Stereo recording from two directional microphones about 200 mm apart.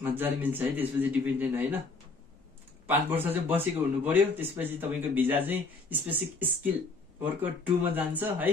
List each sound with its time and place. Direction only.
0.0 s a man's voice: 10° right (ahead or behind)
2.9 s a man's voice: 10° right (ahead or behind)
7.8 s a man's voice: 10° right (ahead or behind)